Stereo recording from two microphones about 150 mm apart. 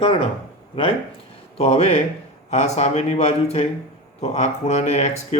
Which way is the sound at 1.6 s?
45° left (ahead or behind).